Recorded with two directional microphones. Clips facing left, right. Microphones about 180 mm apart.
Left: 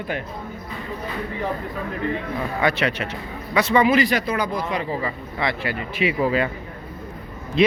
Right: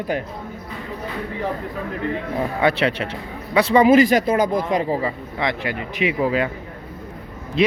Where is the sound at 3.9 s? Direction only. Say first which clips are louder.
Right 6 dB; 45° right (ahead or behind).